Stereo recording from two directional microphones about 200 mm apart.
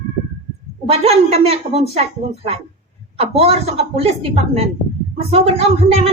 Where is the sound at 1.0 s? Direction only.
30° right (ahead or behind).